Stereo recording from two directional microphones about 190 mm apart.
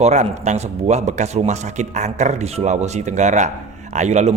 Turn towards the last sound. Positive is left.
turn(degrees=-35)  # may be behind; listen again after turning